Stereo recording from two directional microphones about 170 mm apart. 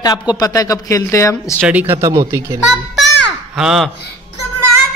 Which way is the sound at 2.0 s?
20° right (ahead or behind).